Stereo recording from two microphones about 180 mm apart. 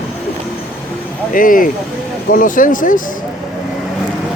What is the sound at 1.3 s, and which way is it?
Speech, 50° left (ahead or behind).